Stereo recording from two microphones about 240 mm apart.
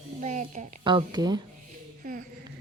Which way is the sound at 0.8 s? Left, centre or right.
Centre.